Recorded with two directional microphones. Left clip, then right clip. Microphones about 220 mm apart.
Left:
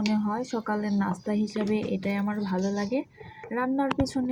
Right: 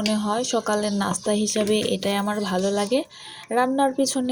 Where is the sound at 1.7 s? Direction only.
25° right (ahead or behind).